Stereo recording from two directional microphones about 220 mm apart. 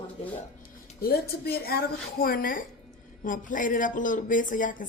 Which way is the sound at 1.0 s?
45° left (ahead or behind).